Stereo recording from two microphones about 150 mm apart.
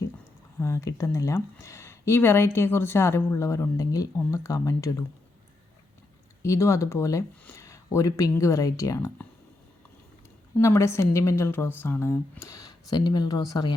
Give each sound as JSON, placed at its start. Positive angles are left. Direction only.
{"t": 0.6, "sound": "speech", "side_deg": 20}
{"t": 6.4, "sound": "speech", "side_deg": 20}
{"t": 10.6, "sound": "speech", "side_deg": 20}